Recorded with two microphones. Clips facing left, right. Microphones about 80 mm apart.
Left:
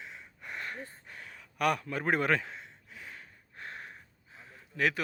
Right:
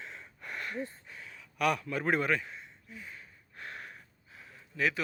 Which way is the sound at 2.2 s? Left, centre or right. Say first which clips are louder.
Left 2 dB; left.